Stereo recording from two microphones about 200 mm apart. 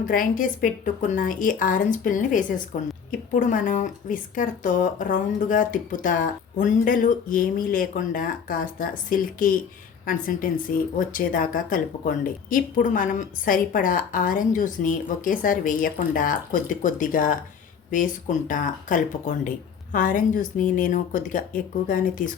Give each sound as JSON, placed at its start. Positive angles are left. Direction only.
{"t": 0.0, "sound": "speech", "side_deg": 45}